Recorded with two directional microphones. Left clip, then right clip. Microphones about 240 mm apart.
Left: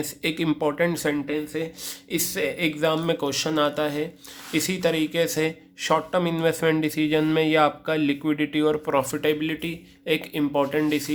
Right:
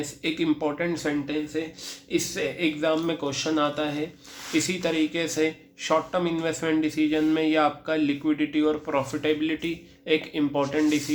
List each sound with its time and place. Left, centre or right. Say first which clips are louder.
0.0 s speech: left 1 dB; left